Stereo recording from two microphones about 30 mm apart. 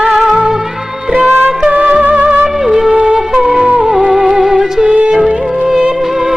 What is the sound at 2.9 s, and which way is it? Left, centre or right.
Wind instrument, right.